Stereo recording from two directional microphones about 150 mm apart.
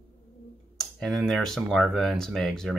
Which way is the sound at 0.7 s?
5° left (ahead or behind).